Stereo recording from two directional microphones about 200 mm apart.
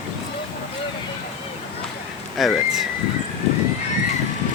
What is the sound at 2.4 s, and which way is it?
Speech, centre (ahead or behind).